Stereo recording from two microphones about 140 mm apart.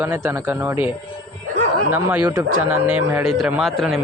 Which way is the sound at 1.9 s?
15° right (ahead or behind).